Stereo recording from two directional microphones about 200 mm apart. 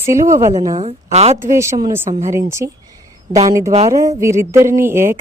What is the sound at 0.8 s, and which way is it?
Speech, 30° right (ahead or behind).